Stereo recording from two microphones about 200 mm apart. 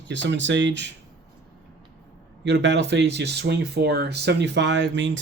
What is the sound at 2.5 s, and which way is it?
Speech, 60° right (ahead or behind).